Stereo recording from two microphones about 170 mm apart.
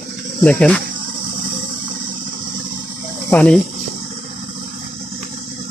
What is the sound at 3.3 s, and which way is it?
Speech, 5° left (ahead or behind).